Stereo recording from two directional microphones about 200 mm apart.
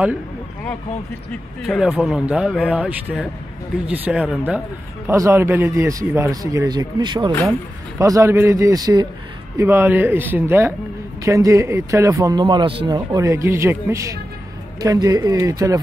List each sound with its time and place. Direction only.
1.7 s a man's voice: centre (ahead or behind)
5.1 s a man's voice: 15° right (ahead or behind)